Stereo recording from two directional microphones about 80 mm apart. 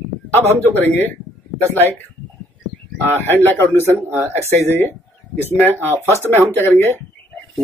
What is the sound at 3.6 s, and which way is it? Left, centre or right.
Speech, right.